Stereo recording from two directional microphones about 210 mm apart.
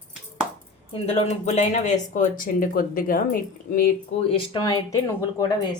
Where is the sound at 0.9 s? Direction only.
30° left (ahead or behind).